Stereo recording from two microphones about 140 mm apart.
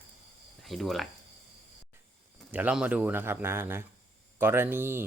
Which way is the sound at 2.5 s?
10° right (ahead or behind).